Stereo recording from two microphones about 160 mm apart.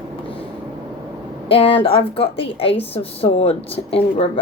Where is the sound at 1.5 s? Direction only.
35° left (ahead or behind).